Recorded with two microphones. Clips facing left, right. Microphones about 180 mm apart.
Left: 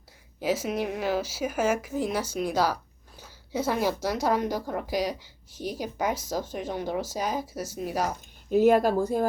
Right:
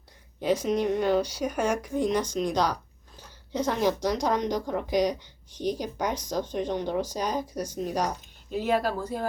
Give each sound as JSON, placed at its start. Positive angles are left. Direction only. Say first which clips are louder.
{"t": 0.4, "sound": "a woman's voice", "louder": "right 3 dB", "side_deg": 5}
{"t": 8.4, "sound": "speech", "louder": "left 6 dB", "side_deg": 45}